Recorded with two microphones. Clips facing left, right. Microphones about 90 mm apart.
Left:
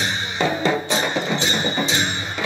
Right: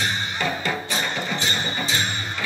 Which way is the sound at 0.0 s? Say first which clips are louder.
Left 3 dB; 20° left (ahead or behind).